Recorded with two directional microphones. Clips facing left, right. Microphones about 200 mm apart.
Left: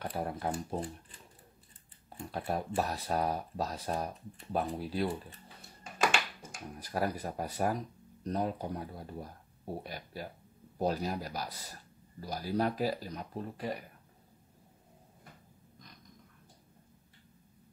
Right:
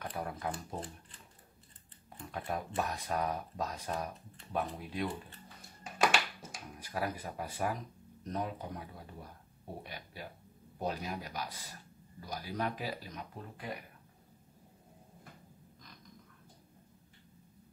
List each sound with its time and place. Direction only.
0.0 s speech: 30° left (ahead or behind)
2.0 s speech: 35° left (ahead or behind)
6.8 s speech: 40° left (ahead or behind)